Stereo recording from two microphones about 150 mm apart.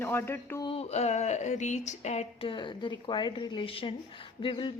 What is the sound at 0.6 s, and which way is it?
Speech, 40° left (ahead or behind).